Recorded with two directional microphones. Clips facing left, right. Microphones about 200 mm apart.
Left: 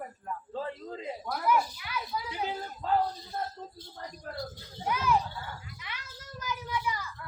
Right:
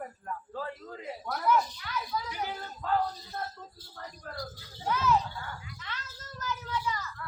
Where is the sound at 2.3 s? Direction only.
25° left (ahead or behind).